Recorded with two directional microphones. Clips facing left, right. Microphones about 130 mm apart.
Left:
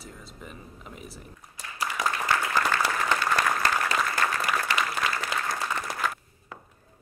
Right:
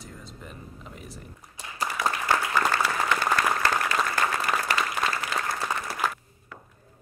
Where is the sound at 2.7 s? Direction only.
40° right (ahead or behind).